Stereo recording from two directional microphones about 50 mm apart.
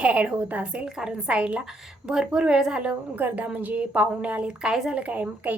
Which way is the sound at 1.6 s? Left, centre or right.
Centre.